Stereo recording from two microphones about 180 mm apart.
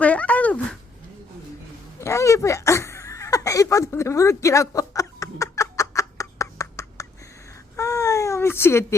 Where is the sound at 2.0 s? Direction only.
15° left (ahead or behind).